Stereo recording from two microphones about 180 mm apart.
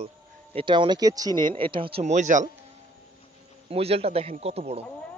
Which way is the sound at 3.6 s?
35° right (ahead or behind).